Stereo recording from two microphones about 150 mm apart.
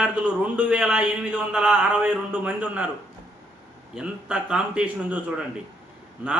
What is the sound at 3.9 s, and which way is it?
A man's voice, 5° right (ahead or behind).